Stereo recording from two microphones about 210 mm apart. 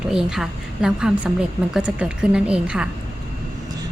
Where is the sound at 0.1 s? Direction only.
Centre (ahead or behind).